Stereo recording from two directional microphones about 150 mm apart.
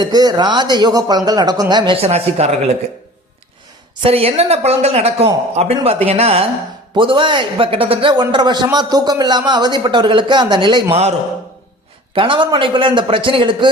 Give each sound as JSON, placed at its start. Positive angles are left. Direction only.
{"t": 0.0, "sound": "speech", "side_deg": -25}
{"t": 2.0, "sound": "speech", "side_deg": -45}
{"t": 4.0, "sound": "a man's voice", "side_deg": -40}
{"t": 12.1, "sound": "a man's voice", "side_deg": -35}